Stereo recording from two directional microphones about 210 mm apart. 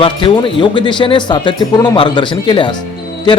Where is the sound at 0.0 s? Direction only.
25° left (ahead or behind).